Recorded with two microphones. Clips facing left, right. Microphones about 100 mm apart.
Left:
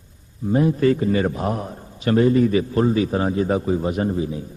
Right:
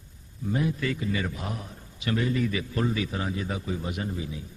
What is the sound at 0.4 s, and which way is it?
A man's voice, 35° left (ahead or behind).